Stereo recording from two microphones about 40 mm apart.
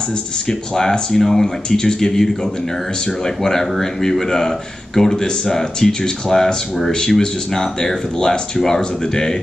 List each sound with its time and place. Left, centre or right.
0.5 s speech: centre